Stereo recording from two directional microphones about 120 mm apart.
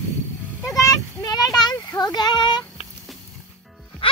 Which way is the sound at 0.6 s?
30° left (ahead or behind).